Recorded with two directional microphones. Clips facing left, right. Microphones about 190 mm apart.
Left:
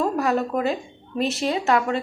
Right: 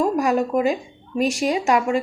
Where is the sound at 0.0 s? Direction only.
15° right (ahead or behind).